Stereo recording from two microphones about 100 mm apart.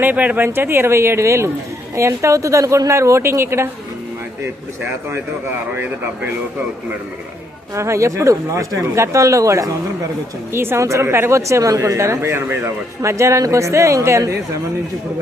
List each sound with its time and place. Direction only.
0.0 s speech: 15° right (ahead or behind)
7.8 s speech: 30° right (ahead or behind)